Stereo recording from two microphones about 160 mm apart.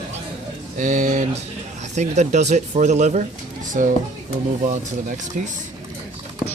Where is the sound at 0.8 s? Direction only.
50° right (ahead or behind).